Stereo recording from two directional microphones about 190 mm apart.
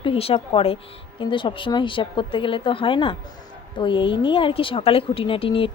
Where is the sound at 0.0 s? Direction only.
30° left (ahead or behind).